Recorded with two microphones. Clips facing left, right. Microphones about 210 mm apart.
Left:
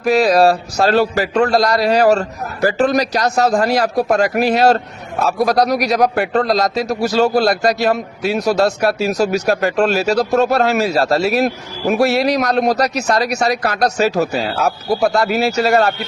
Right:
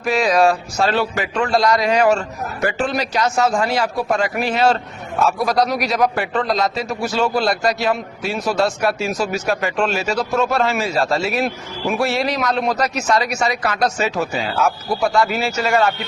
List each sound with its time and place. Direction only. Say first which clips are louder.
0.0 s speech: left 4 dB; 40° left (ahead or behind)